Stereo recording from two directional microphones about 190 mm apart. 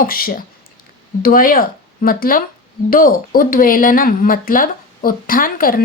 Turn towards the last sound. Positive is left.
turn(degrees=50)  # may be behind; listen again after turning